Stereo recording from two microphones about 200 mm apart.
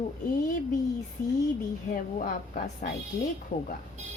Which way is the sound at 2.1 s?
40° left (ahead or behind).